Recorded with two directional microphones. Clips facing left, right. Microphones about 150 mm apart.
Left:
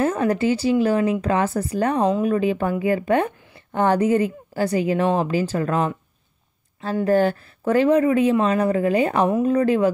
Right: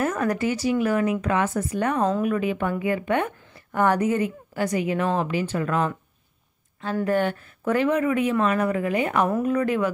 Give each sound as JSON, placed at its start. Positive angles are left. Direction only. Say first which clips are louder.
{"t": 0.0, "sound": "speech", "louder": "left 4 dB", "side_deg": 30}
{"t": 7.1, "sound": "speech", "louder": "left 6 dB", "side_deg": 35}